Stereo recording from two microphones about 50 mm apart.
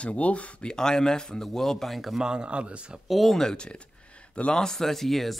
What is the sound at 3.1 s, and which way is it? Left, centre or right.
Speech, centre.